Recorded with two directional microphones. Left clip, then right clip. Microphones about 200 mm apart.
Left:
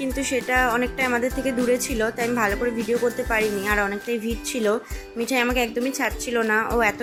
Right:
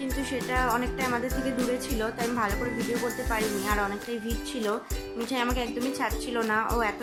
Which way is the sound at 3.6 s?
15° left (ahead or behind).